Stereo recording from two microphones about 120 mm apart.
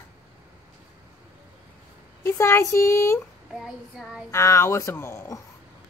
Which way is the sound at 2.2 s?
20° left (ahead or behind).